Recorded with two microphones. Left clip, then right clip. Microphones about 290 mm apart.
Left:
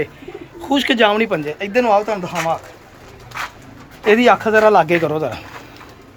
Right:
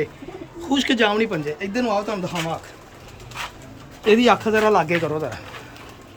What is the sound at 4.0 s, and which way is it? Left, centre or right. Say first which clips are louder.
Speech: left 4 dB; centre.